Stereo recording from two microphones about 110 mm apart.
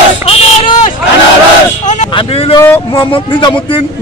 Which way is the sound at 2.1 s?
55° left (ahead or behind).